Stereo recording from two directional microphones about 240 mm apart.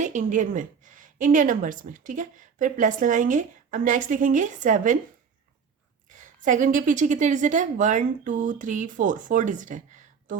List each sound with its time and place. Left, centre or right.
0.0 s a woman's voice: right
6.1 s a woman's voice: right